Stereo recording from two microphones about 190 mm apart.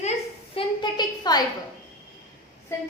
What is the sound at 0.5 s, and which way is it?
Speech, 25° left (ahead or behind).